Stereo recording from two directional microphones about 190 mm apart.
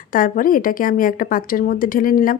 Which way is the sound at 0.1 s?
45° left (ahead or behind).